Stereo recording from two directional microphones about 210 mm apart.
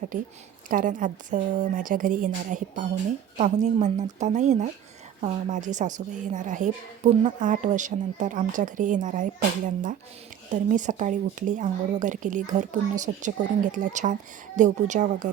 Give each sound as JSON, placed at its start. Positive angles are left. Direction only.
{"t": 0.7, "sound": "speech", "side_deg": -40}